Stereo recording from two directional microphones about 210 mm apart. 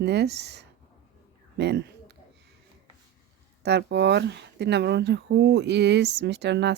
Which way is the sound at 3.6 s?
50° right (ahead or behind).